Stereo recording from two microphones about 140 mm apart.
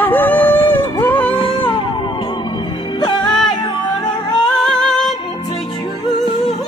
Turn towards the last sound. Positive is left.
turn(degrees=5)  # may be behind; listen again after turning